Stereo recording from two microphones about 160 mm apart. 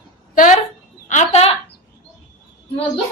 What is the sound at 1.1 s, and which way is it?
Speech, 45° left (ahead or behind).